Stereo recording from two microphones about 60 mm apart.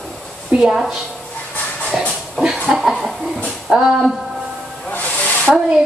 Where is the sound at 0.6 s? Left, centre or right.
Centre.